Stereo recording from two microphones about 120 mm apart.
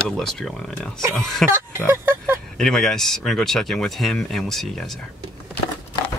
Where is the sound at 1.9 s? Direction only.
20° right (ahead or behind).